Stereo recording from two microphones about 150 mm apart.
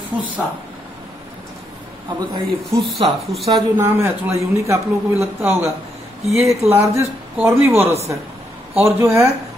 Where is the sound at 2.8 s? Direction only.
Centre (ahead or behind).